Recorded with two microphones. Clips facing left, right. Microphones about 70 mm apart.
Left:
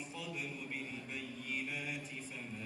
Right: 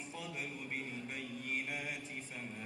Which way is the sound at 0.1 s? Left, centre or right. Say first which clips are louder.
Right 3 dB; right.